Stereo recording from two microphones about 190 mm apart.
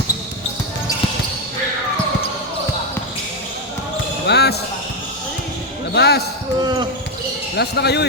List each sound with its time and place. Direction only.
4.3 s basketball bounce: 60° left (ahead or behind)
5.9 s basketball bounce: 60° left (ahead or behind)
6.6 s a sound: 20° right (ahead or behind)
7.5 s speech: 60° left (ahead or behind)